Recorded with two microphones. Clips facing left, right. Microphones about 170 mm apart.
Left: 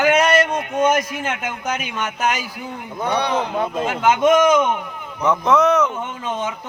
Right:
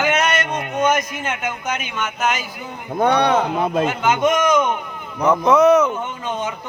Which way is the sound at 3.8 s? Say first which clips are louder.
Left 5 dB; centre (ahead or behind).